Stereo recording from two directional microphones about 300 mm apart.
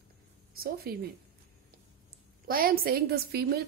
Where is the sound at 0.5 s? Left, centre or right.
Right.